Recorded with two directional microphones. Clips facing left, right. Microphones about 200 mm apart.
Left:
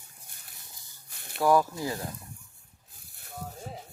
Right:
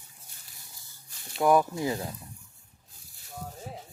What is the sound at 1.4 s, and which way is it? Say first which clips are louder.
Speech: right 1 dB; 20° right (ahead or behind).